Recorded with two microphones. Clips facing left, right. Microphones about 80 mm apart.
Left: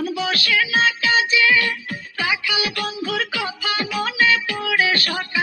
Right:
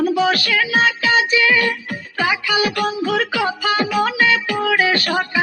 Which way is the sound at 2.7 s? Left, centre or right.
Centre.